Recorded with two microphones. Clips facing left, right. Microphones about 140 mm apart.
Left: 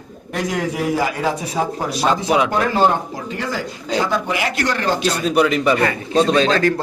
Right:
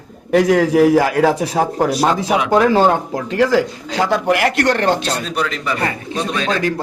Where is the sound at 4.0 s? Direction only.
70° right (ahead or behind).